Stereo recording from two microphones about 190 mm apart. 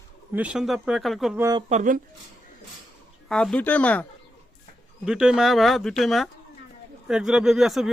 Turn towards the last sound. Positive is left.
turn(degrees=0)  # may be behind; listen again after turning